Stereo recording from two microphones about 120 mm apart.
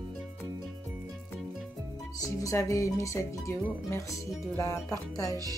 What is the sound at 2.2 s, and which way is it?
Speech, 25° left (ahead or behind).